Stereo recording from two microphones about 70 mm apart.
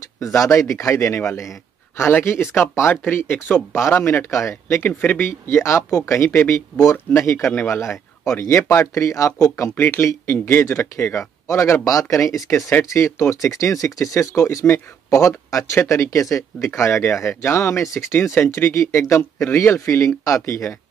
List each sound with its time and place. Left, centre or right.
0.2 s speech: left
2.0 s speech: left
4.8 s speech: left
5.3 s speech: left
9.8 s speech: left